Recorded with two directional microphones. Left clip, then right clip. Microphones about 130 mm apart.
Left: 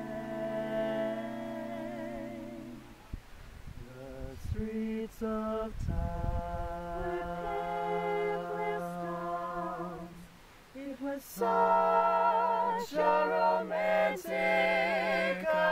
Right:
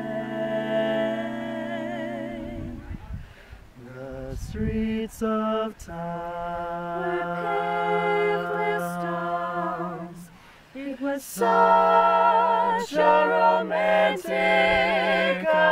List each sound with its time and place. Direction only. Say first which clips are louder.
0.0 s music: right 8 dB; 5° right (ahead or behind)
4.7 s mantra: right 8 dB; 20° right (ahead or behind)
11.3 s music: right 8 dB; 10° right (ahead or behind); by 15.7 s 10° left (ahead or behind)